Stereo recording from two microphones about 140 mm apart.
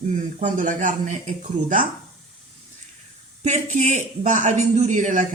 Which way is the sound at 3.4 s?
60° right (ahead or behind).